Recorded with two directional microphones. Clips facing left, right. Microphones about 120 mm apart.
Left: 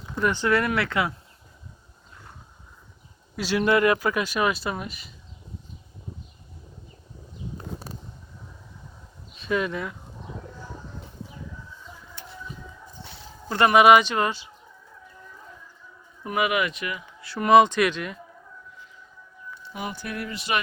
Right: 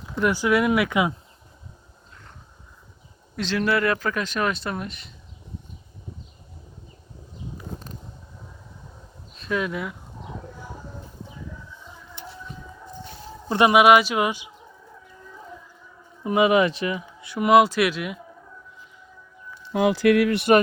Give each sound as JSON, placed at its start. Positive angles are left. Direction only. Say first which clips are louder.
{"t": 0.2, "sound": "speech", "louder": "right 2 dB", "side_deg": -10}
{"t": 3.3, "sound": "speech", "louder": "left 2 dB", "side_deg": 10}
{"t": 9.3, "sound": "speech", "louder": "even", "side_deg": 0}
{"t": 13.5, "sound": "speech", "louder": "right 2 dB", "side_deg": -15}
{"t": 13.7, "sound": "speech", "louder": "left 1 dB", "side_deg": -5}
{"t": 16.2, "sound": "speech", "louder": "right 6 dB", "side_deg": -25}
{"t": 17.2, "sound": "speech", "louder": "even", "side_deg": -15}
{"t": 19.7, "sound": "speech", "louder": "right 15 dB", "side_deg": -90}